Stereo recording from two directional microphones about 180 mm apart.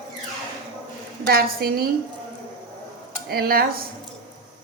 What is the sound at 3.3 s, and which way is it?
Speech, 60° right (ahead or behind).